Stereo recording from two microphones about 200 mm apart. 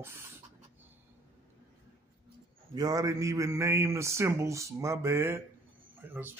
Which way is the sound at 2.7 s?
20° right (ahead or behind).